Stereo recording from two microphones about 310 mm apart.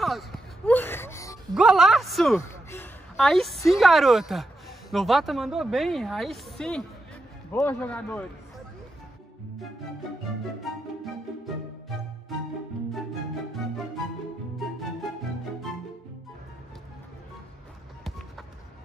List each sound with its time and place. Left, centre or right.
0.0 s a sound: centre
1.5 s a woman's voice: centre
10.6 s music: centre